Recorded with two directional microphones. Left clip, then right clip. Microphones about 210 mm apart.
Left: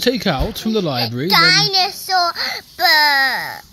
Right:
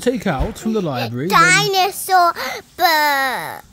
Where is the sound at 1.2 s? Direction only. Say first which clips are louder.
Even; 40° right (ahead or behind).